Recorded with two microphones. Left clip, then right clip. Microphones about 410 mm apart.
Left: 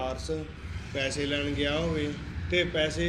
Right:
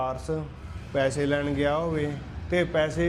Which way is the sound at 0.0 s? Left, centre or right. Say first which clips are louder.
Right 3 dB; right.